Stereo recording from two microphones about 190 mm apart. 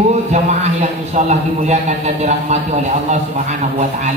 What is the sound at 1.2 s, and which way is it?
A man's voice, 35° right (ahead or behind).